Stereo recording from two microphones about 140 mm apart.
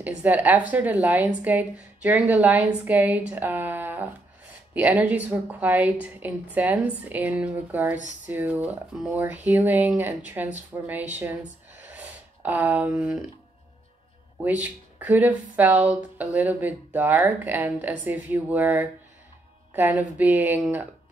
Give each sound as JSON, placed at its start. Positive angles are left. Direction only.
{"t": 0.2, "sound": "speech", "side_deg": -10}
{"t": 11.9, "sound": "a sound", "side_deg": -10}
{"t": 14.4, "sound": "speech", "side_deg": -10}